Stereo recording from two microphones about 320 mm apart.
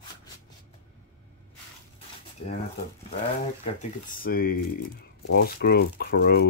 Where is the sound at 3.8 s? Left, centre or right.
Left.